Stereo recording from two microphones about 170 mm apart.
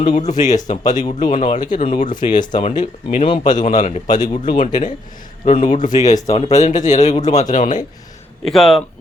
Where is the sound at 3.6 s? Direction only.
45° left (ahead or behind).